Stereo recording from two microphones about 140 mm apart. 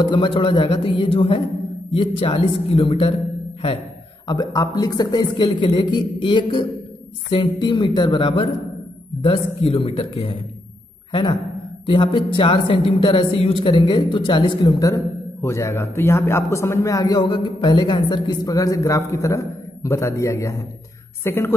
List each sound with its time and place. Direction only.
0.0 s speech: 35° left (ahead or behind)
4.3 s a man's voice: 25° left (ahead or behind)
7.6 s a man's voice: 35° left (ahead or behind); by 21.5 s 15° left (ahead or behind)